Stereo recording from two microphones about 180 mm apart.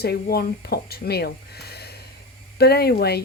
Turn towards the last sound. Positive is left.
turn(degrees=60)  # may be behind; listen again after turning